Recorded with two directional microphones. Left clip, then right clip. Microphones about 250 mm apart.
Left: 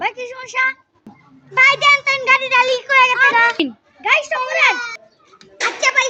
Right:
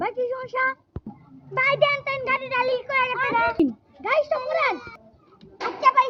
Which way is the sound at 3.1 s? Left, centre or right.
Left.